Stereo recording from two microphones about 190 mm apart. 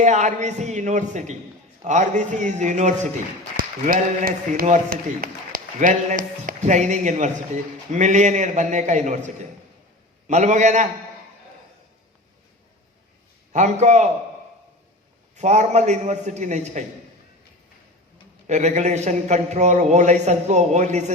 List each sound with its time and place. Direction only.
0.0 s a man's voice: 40° right (ahead or behind)
13.5 s a man's voice: 35° right (ahead or behind)
15.4 s a man's voice: 35° right (ahead or behind)
18.4 s a man's voice: 35° right (ahead or behind)